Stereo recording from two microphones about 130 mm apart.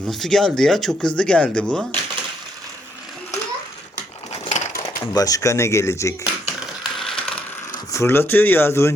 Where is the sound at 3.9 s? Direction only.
60° left (ahead or behind).